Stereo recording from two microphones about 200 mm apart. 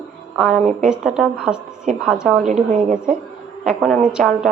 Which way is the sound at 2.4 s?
35° right (ahead or behind).